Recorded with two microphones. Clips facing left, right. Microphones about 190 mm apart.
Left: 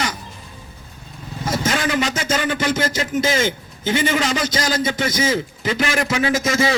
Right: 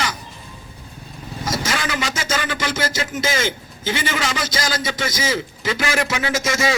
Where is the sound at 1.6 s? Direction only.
40° left (ahead or behind).